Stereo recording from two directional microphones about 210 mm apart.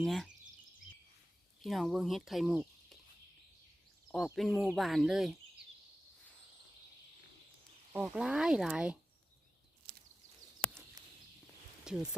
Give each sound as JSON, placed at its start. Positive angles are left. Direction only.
{"t": 0.0, "sound": "speech", "side_deg": 0}
{"t": 1.6, "sound": "speech", "side_deg": 0}
{"t": 4.1, "sound": "speech", "side_deg": 0}
{"t": 7.9, "sound": "speech", "side_deg": -5}
{"t": 9.9, "sound": "a sound", "side_deg": -50}
{"t": 10.6, "sound": "a sound", "side_deg": 5}
{"t": 11.9, "sound": "speech", "side_deg": -5}